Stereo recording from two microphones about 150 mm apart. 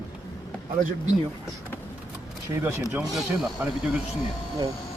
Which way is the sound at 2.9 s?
5° right (ahead or behind).